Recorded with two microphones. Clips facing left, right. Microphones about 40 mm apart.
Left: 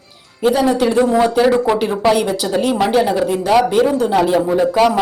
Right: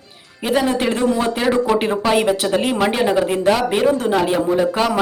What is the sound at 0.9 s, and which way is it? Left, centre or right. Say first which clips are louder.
Speech: left 5 dB; left.